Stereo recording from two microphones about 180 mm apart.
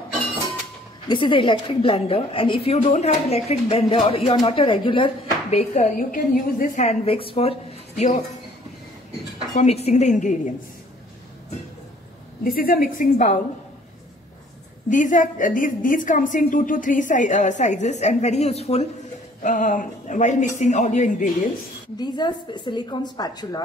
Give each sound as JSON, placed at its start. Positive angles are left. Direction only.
{"t": 1.0, "sound": "a woman's voice", "side_deg": 25}
{"t": 9.6, "sound": "a woman's voice", "side_deg": 35}
{"t": 12.4, "sound": "a woman's voice", "side_deg": 55}
{"t": 14.9, "sound": "a woman's voice", "side_deg": 45}
{"t": 21.9, "sound": "a woman's voice", "side_deg": 25}